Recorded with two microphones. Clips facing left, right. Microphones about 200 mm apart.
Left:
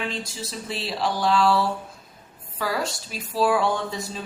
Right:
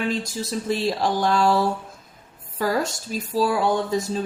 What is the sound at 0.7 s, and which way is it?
Speech, 45° right (ahead or behind).